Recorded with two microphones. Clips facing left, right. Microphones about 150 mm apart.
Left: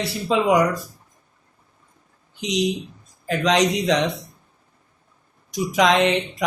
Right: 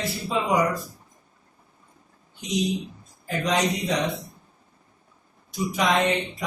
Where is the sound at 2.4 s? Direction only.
90° left.